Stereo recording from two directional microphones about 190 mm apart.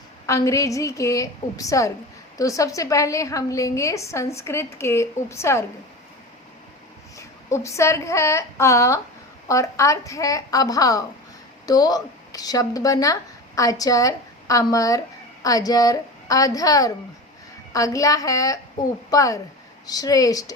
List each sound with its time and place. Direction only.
0.3 s a woman's voice: 15° left (ahead or behind)
7.2 s a woman's voice: 15° left (ahead or behind)